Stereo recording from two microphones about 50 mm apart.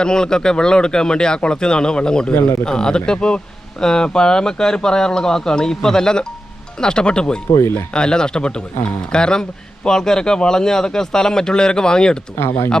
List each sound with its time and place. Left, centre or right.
0.0 s speech: centre
12.4 s speech: left